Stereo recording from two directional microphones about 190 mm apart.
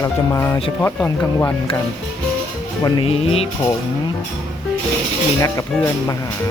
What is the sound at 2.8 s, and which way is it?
Speech, 30° left (ahead or behind).